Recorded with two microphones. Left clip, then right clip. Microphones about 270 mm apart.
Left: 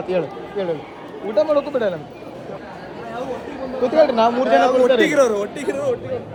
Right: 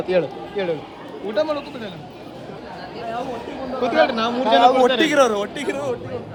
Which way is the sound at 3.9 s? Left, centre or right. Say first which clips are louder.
Left 4 dB; right.